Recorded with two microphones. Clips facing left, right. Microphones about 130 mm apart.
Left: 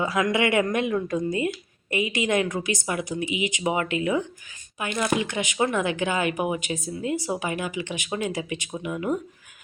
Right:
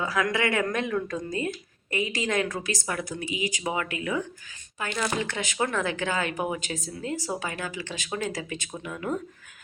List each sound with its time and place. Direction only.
0.0 s a woman's voice: 20° left (ahead or behind)